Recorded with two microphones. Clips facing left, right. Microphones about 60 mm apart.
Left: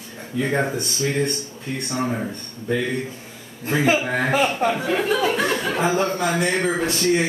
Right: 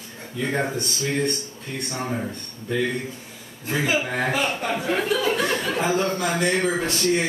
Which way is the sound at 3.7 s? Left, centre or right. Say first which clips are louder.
Left 4 dB; left.